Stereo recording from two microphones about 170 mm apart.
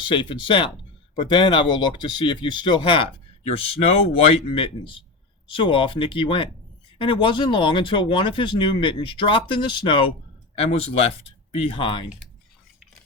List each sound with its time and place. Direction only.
0.1 s speech: 30° left (ahead or behind)